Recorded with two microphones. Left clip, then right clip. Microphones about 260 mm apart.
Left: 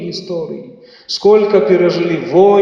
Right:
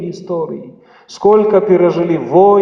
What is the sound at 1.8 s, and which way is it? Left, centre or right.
Speech, right.